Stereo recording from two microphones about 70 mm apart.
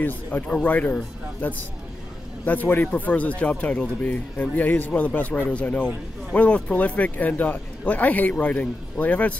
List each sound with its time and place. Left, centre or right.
0.0 s speech: left